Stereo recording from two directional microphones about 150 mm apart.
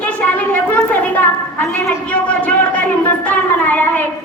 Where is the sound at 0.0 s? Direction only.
10° left (ahead or behind).